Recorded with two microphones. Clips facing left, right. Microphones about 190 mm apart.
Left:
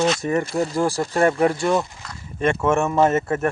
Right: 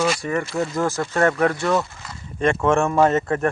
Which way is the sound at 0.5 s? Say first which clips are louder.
Left 1 dB; 20° left (ahead or behind).